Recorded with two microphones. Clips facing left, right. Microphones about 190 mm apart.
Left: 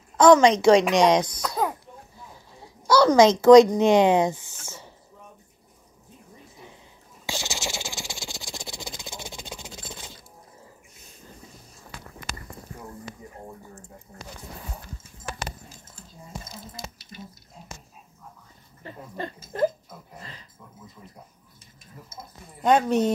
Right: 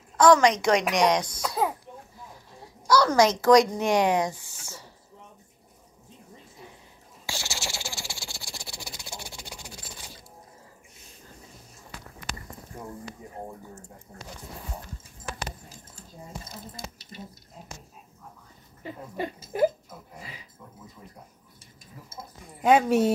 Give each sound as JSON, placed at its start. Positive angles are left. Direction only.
{"t": 0.2, "sound": "speech", "side_deg": 25}
{"t": 1.4, "sound": "a child's voice", "side_deg": -5}
{"t": 2.9, "sound": "speech", "side_deg": 25}
{"t": 7.2, "sound": "rattle", "side_deg": 20}
{"t": 12.7, "sound": "a sound", "side_deg": -30}
{"t": 18.8, "sound": "speech", "side_deg": -15}
{"t": 20.2, "sound": "dog", "side_deg": -10}
{"t": 22.6, "sound": "a woman's voice", "side_deg": -5}